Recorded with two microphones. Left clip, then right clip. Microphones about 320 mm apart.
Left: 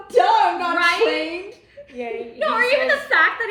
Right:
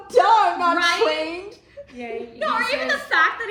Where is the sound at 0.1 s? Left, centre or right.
Right.